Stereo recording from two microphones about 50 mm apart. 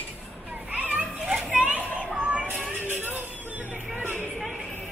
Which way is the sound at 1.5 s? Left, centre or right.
Right.